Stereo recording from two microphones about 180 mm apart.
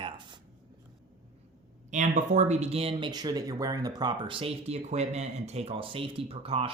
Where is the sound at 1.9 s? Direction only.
40° right (ahead or behind).